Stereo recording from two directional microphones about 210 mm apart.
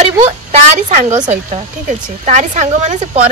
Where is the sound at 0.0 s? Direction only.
30° right (ahead or behind).